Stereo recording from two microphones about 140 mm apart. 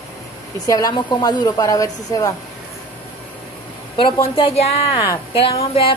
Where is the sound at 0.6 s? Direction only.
25° left (ahead or behind).